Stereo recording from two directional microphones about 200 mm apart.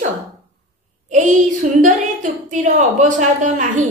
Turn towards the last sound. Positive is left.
turn(degrees=-35)  # may be behind; listen again after turning